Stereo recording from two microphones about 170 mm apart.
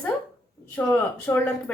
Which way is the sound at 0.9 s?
20° left (ahead or behind).